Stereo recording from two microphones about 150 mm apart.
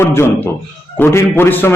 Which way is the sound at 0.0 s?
15° left (ahead or behind).